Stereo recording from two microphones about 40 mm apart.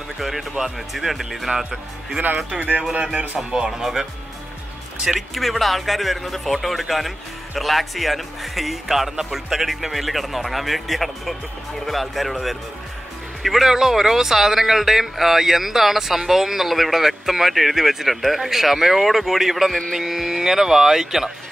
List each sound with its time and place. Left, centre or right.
0.2 s speech: centre
2.9 s speech: right
3.5 s a man's voice: centre